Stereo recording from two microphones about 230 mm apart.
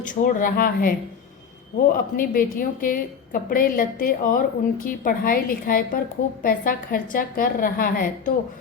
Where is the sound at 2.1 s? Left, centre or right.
Left.